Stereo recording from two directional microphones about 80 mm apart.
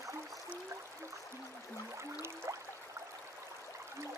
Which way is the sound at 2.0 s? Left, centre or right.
Right.